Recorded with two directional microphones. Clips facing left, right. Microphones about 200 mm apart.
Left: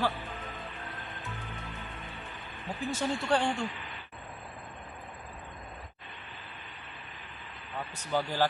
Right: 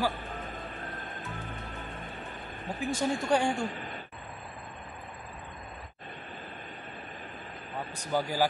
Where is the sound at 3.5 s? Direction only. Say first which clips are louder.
Right 2 dB; 45° right (ahead or behind).